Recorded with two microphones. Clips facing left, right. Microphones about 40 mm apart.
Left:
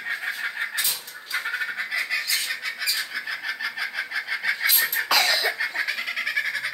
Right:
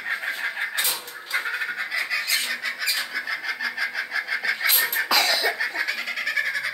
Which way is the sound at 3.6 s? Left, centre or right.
Centre.